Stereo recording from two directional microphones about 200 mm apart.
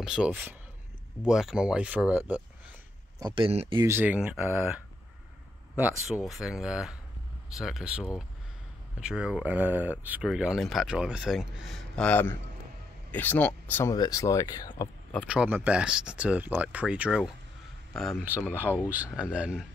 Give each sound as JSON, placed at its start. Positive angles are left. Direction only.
{"t": 0.0, "sound": "speech", "side_deg": -5}
{"t": 3.3, "sound": "speech", "side_deg": -25}
{"t": 3.8, "sound": "speech", "side_deg": -10}
{"t": 15.2, "sound": "speech", "side_deg": -5}